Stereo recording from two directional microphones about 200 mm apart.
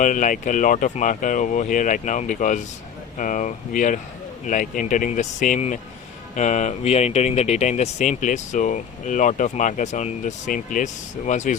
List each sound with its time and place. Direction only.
0.0 s speech: 40° left (ahead or behind)